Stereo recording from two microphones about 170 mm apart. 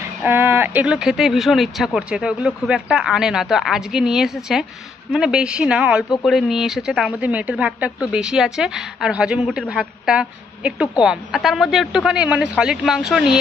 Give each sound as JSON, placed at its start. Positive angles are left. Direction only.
{"t": 0.2, "sound": "speech", "side_deg": -10}